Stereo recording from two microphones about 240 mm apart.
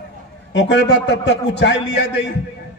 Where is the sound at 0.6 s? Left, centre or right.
Left.